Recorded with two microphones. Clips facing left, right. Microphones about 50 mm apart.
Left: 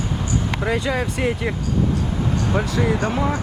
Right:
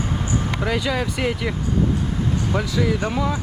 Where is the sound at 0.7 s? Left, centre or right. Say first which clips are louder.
Left 1 dB; left.